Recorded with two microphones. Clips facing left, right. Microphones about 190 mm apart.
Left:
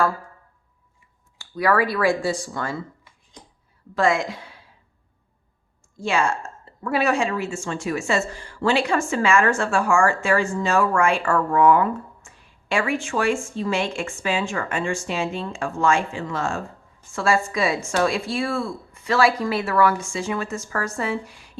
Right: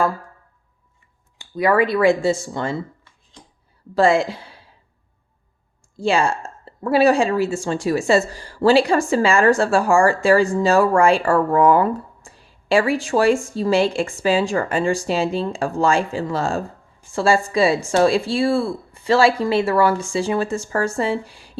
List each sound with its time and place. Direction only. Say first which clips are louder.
1.4 s speech: right 3 dB; 20° right (ahead or behind)
3.9 s a woman's voice: right 5 dB; 30° right (ahead or behind)
6.0 s a woman's voice: right 4 dB; 30° right (ahead or behind)